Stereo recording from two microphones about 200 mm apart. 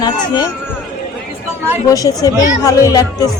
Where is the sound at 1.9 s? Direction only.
20° left (ahead or behind).